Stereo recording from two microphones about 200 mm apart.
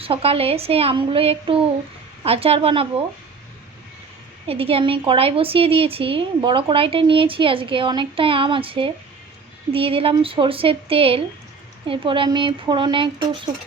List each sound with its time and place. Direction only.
0.0 s a woman's voice: 30° right (ahead or behind)
4.4 s a woman's voice: 30° right (ahead or behind)